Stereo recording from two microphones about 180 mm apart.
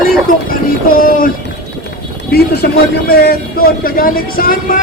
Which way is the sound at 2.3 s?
60° left (ahead or behind).